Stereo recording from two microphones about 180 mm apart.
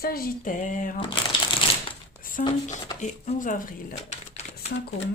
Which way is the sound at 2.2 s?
50° left (ahead or behind).